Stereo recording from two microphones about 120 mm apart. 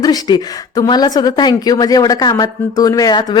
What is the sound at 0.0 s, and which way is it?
A woman's voice, 35° left (ahead or behind).